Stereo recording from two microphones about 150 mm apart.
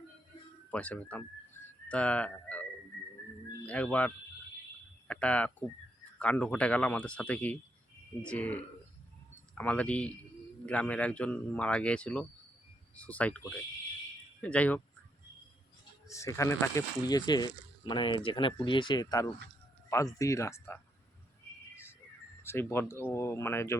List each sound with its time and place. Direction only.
0.7 s speech: 10° left (ahead or behind)
3.7 s a man's voice: 10° left (ahead or behind)
14.4 s a man's voice: 10° left (ahead or behind)
16.0 s speech: 20° left (ahead or behind)
22.4 s a man's voice: 15° left (ahead or behind)